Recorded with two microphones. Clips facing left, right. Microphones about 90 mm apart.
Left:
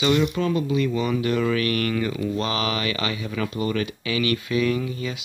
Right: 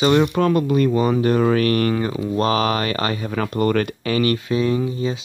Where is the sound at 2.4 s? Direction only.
40° right (ahead or behind).